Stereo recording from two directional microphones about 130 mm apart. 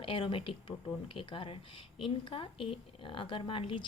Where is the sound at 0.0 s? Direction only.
45° left (ahead or behind).